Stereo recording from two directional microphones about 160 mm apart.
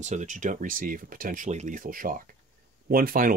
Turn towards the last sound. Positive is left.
turn(degrees=-60)  # may be behind; listen again after turning